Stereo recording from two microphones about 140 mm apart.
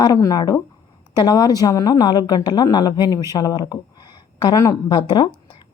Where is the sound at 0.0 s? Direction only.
25° left (ahead or behind).